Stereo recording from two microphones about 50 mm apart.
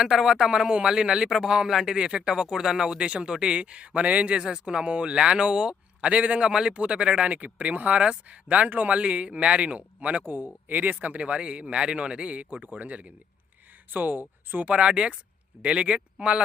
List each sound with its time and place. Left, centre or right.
0.0 s a man's voice: centre; by 10.2 s right
10.2 s speech: right
14.7 s speech: right